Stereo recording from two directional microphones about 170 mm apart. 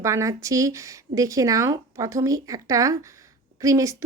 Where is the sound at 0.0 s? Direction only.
20° right (ahead or behind).